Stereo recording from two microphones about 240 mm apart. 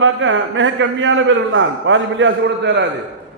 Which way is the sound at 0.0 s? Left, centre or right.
Right.